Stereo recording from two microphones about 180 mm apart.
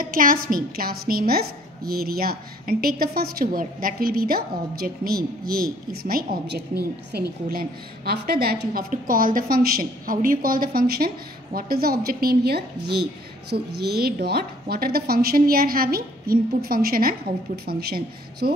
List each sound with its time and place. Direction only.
0.0 s a woman's voice: 50° right (ahead or behind)